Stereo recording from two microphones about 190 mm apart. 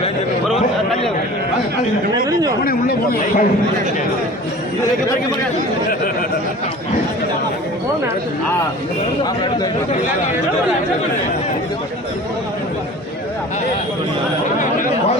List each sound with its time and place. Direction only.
2.6 s a man's voice: 50° left (ahead or behind)